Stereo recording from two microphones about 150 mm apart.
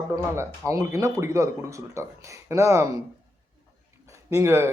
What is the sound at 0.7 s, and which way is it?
Speech, 20° right (ahead or behind).